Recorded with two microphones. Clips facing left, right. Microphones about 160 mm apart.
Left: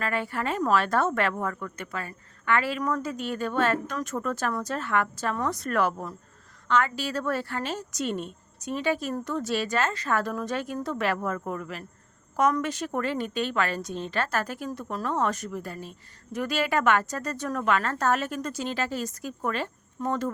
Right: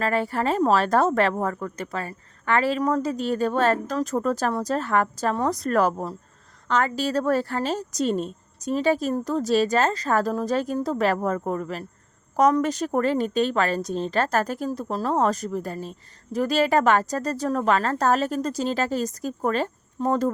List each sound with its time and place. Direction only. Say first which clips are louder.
0.0 s a woman's voice: right 6 dB; 40° right (ahead or behind)